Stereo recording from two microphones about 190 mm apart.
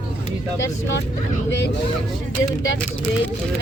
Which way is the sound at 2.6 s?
75° left (ahead or behind).